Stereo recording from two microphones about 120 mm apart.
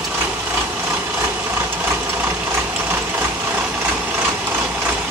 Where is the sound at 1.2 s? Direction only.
20° right (ahead or behind).